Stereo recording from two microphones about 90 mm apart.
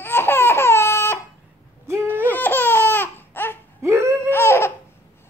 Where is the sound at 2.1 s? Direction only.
20° left (ahead or behind).